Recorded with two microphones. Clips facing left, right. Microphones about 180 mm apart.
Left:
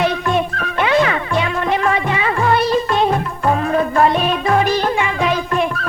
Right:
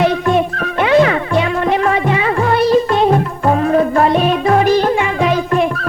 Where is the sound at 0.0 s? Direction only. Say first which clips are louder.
Right 4 dB; 45° right (ahead or behind).